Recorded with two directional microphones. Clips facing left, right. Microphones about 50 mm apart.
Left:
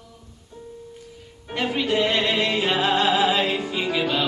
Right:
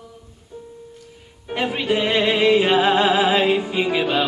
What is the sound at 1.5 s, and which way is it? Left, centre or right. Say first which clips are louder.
Music: right 2 dB; centre.